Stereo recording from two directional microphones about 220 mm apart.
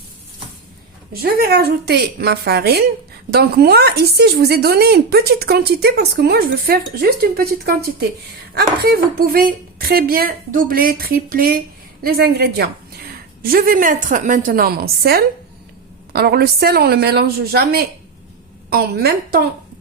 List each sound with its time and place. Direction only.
1.1 s a woman's voice: 45° right (ahead or behind)